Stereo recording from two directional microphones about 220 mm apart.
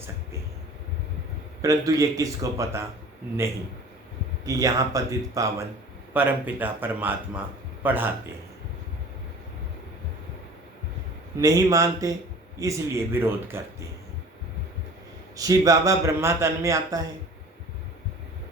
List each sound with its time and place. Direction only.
1.6 s a man's voice: 15° right (ahead or behind)
4.4 s a man's voice: 15° right (ahead or behind)
11.3 s a man's voice: 15° right (ahead or behind)
15.4 s a man's voice: 15° right (ahead or behind)